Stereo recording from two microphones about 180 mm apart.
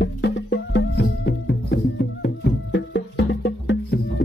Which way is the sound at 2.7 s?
75° left (ahead or behind).